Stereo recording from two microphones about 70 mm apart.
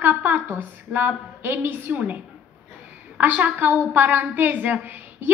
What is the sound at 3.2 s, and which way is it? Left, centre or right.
A woman's voice, right.